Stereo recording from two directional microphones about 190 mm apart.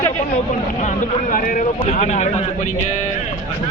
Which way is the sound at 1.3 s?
45° left (ahead or behind).